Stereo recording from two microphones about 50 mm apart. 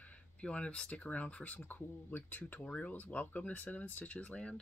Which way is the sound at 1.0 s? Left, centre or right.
Left.